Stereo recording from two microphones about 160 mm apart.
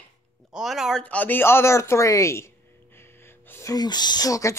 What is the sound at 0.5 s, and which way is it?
Speech, 5° right (ahead or behind).